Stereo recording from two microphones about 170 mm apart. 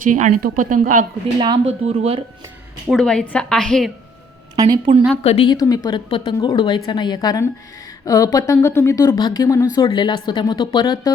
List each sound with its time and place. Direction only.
0.0 s a woman's voice: 50° right (ahead or behind)
1.9 s speech: 35° right (ahead or behind)
2.8 s a woman's voice: centre (ahead or behind)
4.5 s a woman's voice: 25° right (ahead or behind)
5.2 s a woman's voice: 40° left (ahead or behind)
5.5 s a woman's voice: 20° left (ahead or behind)